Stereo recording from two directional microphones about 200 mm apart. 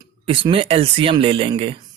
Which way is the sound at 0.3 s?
25° right (ahead or behind).